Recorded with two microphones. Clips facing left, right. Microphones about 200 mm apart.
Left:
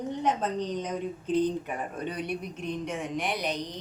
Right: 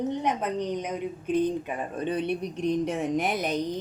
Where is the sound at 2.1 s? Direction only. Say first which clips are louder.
Right 9 dB; 25° right (ahead or behind); by 3.6 s 50° right (ahead or behind).